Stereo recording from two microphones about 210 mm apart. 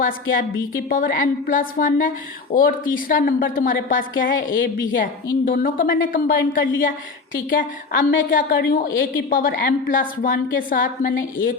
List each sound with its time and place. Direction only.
0.0 s a woman's voice: 40° left (ahead or behind)